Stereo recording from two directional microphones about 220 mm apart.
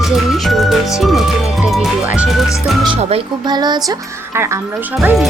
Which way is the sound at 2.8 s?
25° right (ahead or behind).